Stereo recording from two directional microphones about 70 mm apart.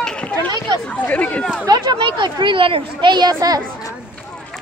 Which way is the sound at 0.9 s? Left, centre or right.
Left.